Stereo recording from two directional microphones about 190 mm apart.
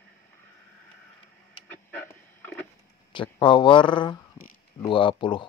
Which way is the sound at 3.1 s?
25° left (ahead or behind).